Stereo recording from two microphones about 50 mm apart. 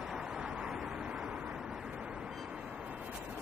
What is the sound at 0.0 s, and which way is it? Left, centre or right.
Vehicle, centre.